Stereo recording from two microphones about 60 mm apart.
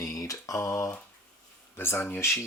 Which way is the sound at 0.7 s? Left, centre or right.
Left.